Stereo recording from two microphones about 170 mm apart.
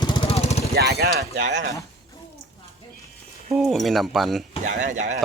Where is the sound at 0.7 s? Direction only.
70° right (ahead or behind).